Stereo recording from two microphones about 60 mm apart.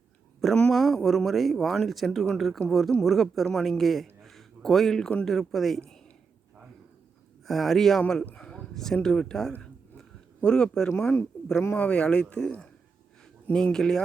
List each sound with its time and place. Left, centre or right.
0.7 s a man's voice: centre
7.4 s speech: centre
8.4 s a sound: centre
9.0 s speech: centre
9.6 s a sound: centre
11.7 s speech: centre
13.5 s speech: centre